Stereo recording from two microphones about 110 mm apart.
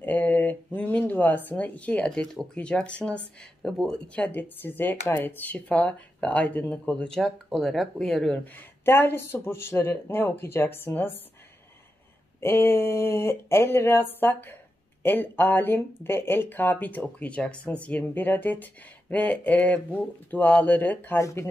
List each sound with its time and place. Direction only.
0.0 s a sound: 15° left (ahead or behind)
2.5 s speech: 10° left (ahead or behind)
8.5 s speech: 20° left (ahead or behind)
12.4 s speech: 20° left (ahead or behind)
21.2 s speech: 30° left (ahead or behind)